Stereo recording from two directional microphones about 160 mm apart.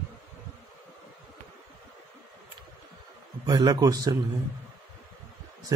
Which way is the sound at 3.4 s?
25° right (ahead or behind).